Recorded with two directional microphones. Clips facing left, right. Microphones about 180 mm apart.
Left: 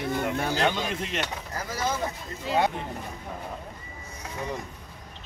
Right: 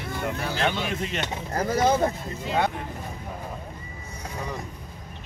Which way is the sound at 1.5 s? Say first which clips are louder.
Right 9 dB; 55° right (ahead or behind).